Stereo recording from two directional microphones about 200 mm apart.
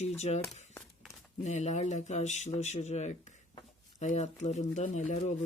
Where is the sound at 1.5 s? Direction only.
35° left (ahead or behind).